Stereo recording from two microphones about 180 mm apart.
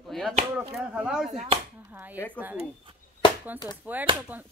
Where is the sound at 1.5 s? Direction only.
30° right (ahead or behind).